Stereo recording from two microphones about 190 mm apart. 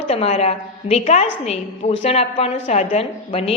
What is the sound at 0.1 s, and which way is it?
A woman's voice, 35° left (ahead or behind).